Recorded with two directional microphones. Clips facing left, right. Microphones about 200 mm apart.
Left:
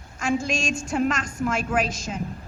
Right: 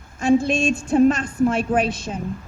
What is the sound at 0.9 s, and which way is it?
A woman's voice, 35° right (ahead or behind).